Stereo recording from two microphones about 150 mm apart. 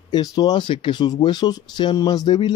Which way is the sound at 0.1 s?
25° left (ahead or behind).